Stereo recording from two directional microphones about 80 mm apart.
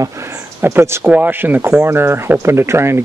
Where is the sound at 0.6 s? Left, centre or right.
Right.